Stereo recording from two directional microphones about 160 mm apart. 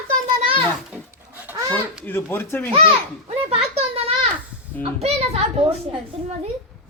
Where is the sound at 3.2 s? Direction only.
40° right (ahead or behind).